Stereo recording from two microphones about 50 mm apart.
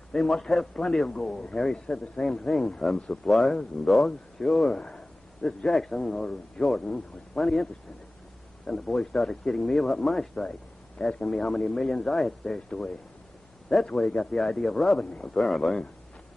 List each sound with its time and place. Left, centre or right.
0.1 s speech: centre
4.7 s a sound: centre
5.7 s speech: centre
13.8 s speech: centre
15.0 s speech: centre
15.3 s speech: centre